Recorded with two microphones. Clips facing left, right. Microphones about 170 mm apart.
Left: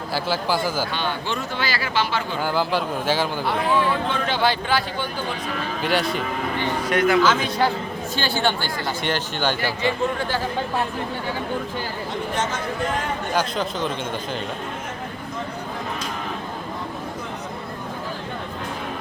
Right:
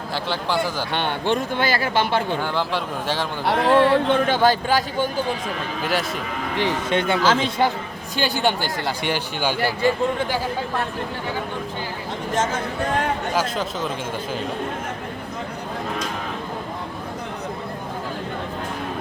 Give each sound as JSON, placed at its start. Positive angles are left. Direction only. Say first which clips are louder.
{"t": 0.1, "sound": "a man's voice", "louder": "left 1 dB", "side_deg": 5}
{"t": 0.9, "sound": "speech", "louder": "right 4 dB", "side_deg": -60}
{"t": 2.4, "sound": "a man's voice", "louder": "left 2 dB", "side_deg": 5}
{"t": 3.4, "sound": "speech", "louder": "right 8 dB", "side_deg": -70}
{"t": 4.3, "sound": "speech", "louder": "right 3 dB", "side_deg": -45}
{"t": 5.8, "sound": "a man's voice", "louder": "left 2 dB", "side_deg": 0}
{"t": 6.8, "sound": "a man's voice", "louder": "left 4 dB", "side_deg": -25}
{"t": 8.1, "sound": "speech", "louder": "right 2 dB", "side_deg": -15}
{"t": 9.8, "sound": "speech", "louder": "right 4 dB", "side_deg": -45}
{"t": 13.3, "sound": "a man's voice", "louder": "even", "side_deg": 0}